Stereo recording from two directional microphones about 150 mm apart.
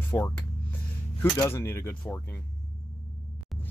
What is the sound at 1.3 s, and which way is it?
Speech, 15° left (ahead or behind).